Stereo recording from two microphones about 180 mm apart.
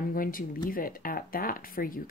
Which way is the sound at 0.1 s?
50° left (ahead or behind).